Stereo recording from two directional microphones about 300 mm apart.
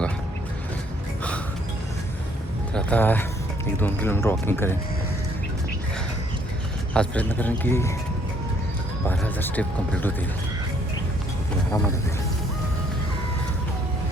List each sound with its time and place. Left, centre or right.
2.7 s speech: centre
6.9 s speech: centre
9.0 s speech: centre